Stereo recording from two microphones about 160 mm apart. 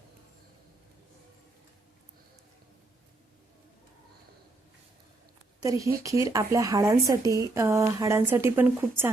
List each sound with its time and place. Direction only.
5.6 s speech: 20° right (ahead or behind)